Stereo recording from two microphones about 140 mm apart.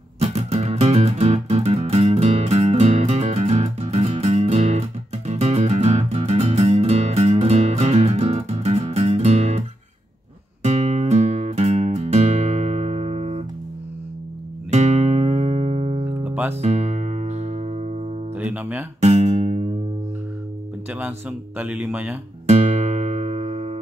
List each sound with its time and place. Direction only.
0.2 s music: 50° right (ahead or behind)
10.6 s music: 55° right (ahead or behind)
14.7 s music: 55° right (ahead or behind)
16.3 s music: 10° right (ahead or behind)
16.6 s music: 55° right (ahead or behind)
18.4 s guitar: 10° right (ahead or behind)
18.9 s guitar: 55° right (ahead or behind)
20.9 s speech: 10° right (ahead or behind)
22.5 s music: 55° right (ahead or behind)